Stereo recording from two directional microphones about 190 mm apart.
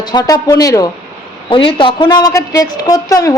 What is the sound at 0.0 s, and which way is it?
A woman's voice, 20° left (ahead or behind).